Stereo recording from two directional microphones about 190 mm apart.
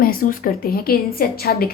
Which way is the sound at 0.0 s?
50° left (ahead or behind).